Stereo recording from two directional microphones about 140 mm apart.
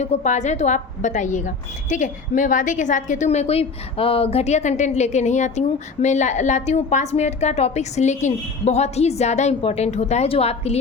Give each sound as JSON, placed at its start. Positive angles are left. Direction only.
{"t": 0.0, "sound": "a woman's voice", "side_deg": 55}